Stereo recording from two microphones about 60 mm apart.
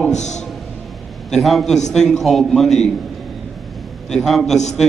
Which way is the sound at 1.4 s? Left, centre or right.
Centre.